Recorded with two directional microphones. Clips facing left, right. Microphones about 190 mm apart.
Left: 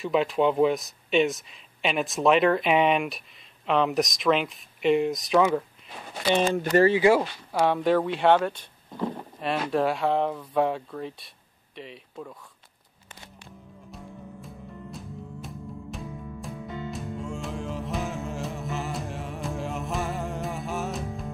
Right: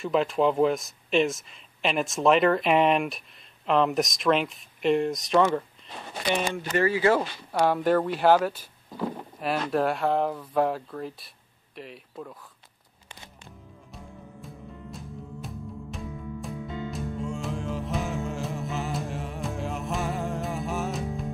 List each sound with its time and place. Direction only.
0.0 s speech: centre (ahead or behind)
6.5 s speech: 35° left (ahead or behind)
6.9 s speech: 15° left (ahead or behind); by 12.4 s centre (ahead or behind)
13.9 s music: centre (ahead or behind)